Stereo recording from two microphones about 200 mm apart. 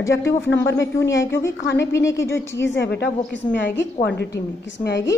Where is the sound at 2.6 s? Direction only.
65° left (ahead or behind).